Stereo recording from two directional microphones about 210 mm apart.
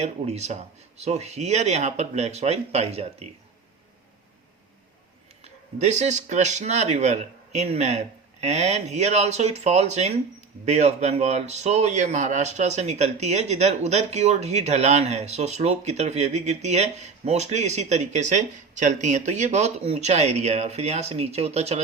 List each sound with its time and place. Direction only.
0.0 s speech: 30° right (ahead or behind)
5.8 s speech: 35° right (ahead or behind)